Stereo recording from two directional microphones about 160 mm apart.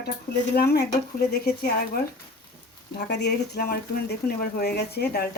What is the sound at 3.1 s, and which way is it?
A man's voice, 90° left.